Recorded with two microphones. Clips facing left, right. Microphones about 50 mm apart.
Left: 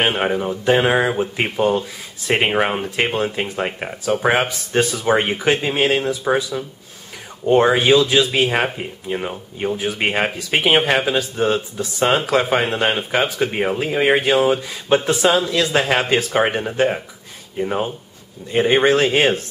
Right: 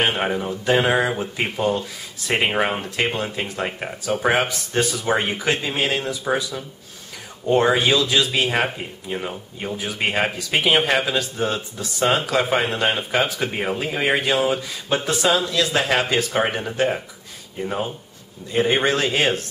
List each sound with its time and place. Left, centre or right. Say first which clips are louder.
0.0 s speech: left 3 dB; centre
10.5 s a man's voice: left 3 dB; left
10.8 s speech: left 2 dB; centre
11.1 s a man's voice: left 4 dB; left